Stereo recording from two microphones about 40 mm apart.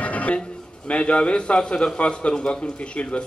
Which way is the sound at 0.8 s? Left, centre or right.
Left.